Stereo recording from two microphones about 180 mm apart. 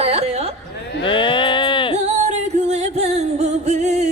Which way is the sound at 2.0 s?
40° right (ahead or behind).